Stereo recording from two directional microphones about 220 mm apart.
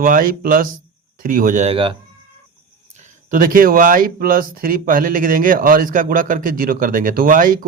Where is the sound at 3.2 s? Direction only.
40° right (ahead or behind).